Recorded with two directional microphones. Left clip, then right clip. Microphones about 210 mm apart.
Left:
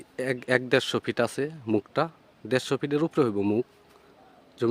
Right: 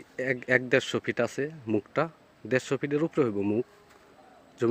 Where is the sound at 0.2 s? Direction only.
20° left (ahead or behind).